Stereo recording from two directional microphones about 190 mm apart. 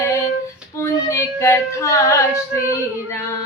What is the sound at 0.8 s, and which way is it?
Child singing, 15° left (ahead or behind).